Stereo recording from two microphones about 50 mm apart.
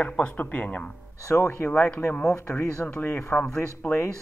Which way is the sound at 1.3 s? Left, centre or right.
Left.